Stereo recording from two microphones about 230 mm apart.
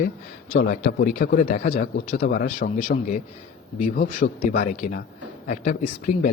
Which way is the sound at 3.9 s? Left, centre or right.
Left.